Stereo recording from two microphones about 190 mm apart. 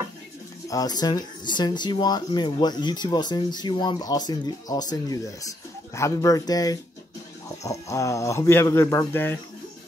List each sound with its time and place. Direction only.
0.7 s speech: 20° left (ahead or behind)